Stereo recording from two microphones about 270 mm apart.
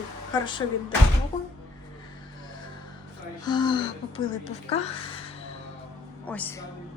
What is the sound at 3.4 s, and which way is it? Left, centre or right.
Speech, centre.